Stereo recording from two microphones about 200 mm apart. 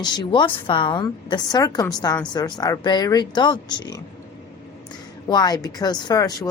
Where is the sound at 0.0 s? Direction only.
20° left (ahead or behind).